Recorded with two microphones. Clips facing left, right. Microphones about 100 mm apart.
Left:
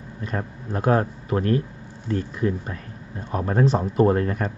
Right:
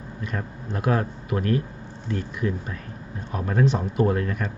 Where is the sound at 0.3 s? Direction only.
35° left (ahead or behind).